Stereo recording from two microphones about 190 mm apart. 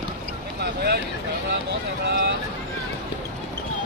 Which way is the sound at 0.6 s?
55° right (ahead or behind).